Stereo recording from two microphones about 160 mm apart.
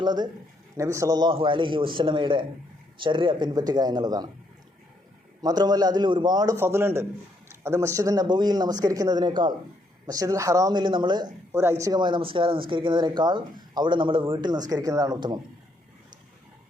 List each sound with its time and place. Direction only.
0.0 s speech: 25° right (ahead or behind)
5.4 s speech: 25° right (ahead or behind)